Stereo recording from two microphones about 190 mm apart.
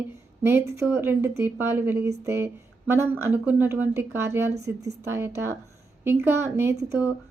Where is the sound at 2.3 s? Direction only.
10° right (ahead or behind).